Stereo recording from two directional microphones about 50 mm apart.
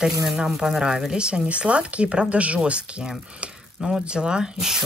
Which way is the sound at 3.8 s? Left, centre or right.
Centre.